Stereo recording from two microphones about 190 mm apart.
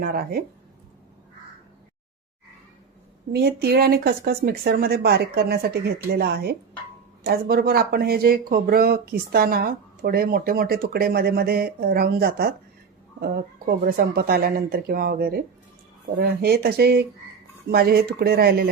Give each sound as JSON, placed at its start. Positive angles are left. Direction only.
{"t": 0.0, "sound": "speech", "side_deg": -55}
{"t": 3.3, "sound": "speech", "side_deg": -55}